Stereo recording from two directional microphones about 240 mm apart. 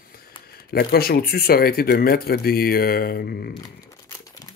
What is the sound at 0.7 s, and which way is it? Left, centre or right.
Speech, left.